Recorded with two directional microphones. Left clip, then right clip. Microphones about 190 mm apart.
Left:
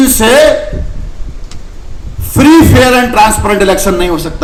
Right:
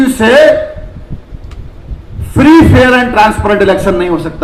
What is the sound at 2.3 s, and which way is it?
A man's voice, 50° left (ahead or behind).